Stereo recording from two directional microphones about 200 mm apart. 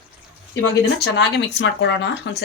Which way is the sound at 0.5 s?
60° left (ahead or behind).